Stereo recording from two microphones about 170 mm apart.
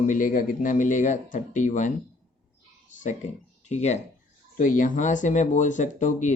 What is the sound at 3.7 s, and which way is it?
Speech, 40° left (ahead or behind).